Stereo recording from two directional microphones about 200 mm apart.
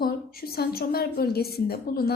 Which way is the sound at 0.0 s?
50° left (ahead or behind).